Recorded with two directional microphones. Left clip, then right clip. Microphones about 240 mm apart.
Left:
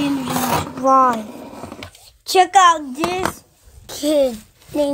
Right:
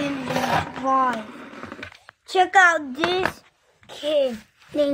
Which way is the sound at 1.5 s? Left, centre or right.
Centre.